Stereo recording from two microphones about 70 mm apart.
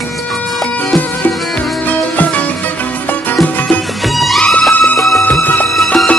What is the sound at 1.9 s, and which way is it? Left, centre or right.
Music, left.